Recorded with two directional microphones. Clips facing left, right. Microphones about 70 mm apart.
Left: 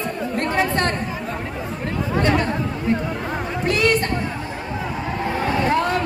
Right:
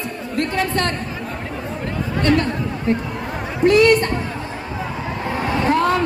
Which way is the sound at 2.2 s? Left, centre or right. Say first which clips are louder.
Right 2 dB; centre.